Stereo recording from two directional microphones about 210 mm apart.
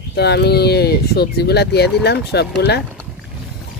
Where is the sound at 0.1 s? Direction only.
50° left (ahead or behind).